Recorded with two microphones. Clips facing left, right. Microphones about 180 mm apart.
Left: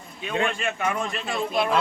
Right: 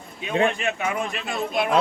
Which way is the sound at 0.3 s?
20° right (ahead or behind).